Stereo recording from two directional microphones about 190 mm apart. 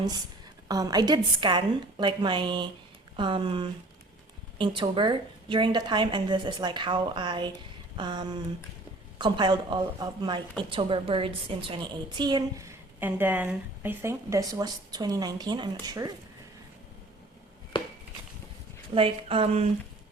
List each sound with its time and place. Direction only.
0.7 s a woman's voice: 20° right (ahead or behind)
18.9 s a woman's voice: 30° right (ahead or behind)